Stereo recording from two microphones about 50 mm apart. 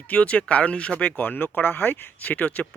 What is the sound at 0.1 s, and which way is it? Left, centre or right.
Speech, left.